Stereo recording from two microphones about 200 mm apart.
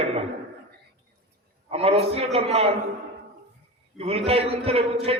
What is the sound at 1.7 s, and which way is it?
Speech, 30° right (ahead or behind).